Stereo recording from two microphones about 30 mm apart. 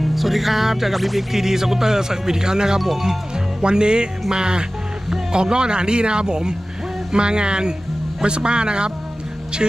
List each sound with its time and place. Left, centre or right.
0.0 s music: centre
1.3 s speech: centre
3.6 s speech: right